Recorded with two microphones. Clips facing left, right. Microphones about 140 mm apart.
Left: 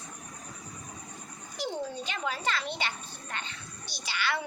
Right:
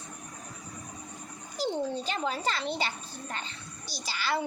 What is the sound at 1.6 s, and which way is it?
A child's voice, 35° right (ahead or behind).